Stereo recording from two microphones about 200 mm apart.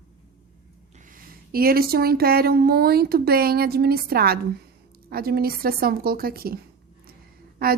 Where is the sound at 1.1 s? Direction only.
45° right (ahead or behind).